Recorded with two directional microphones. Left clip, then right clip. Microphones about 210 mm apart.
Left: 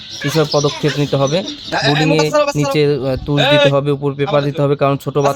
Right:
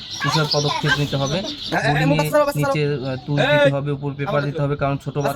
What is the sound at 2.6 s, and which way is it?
Speech, 50° left (ahead or behind).